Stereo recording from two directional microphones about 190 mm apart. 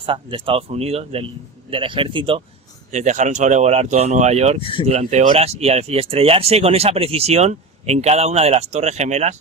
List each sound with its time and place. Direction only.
0.0 s speech: 25° right (ahead or behind)
2.9 s speech: 40° right (ahead or behind)
4.6 s speech: 25° left (ahead or behind)
4.9 s speech: 35° right (ahead or behind)